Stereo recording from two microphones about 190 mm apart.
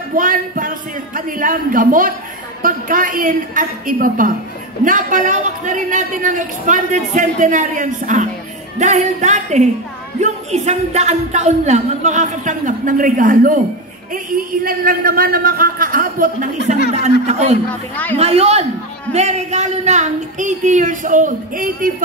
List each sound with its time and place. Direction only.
0.1 s a man's voice: 45° right (ahead or behind)
17.6 s a man's voice: 10° left (ahead or behind)
18.1 s a man's voice: 35° right (ahead or behind)